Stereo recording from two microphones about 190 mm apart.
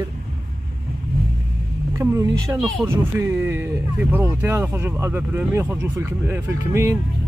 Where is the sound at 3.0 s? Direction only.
10° right (ahead or behind).